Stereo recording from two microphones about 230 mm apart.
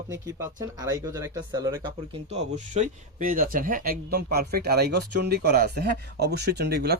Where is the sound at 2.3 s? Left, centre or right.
Right.